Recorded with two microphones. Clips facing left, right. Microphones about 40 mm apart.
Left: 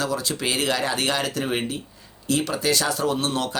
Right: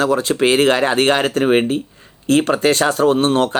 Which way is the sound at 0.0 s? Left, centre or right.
Right.